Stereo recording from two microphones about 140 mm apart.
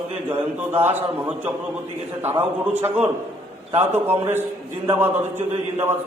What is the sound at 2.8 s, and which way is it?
A man's voice, 15° right (ahead or behind).